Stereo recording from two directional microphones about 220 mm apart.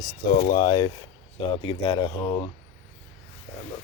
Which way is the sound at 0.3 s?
35° left (ahead or behind).